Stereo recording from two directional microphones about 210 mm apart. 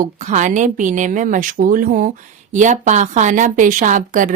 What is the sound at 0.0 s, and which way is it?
A woman's voice, 35° right (ahead or behind).